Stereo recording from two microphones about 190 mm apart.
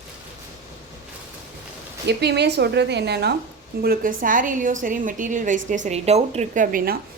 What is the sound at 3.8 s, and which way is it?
A woman's voice, 50° right (ahead or behind).